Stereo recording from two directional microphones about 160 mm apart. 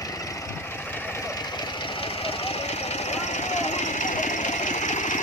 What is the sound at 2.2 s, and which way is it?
Vehicle, 40° left (ahead or behind).